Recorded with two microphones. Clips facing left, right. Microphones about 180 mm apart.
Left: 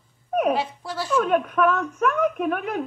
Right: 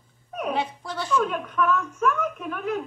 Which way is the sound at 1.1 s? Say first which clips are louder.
Left 4 dB; 60° left (ahead or behind).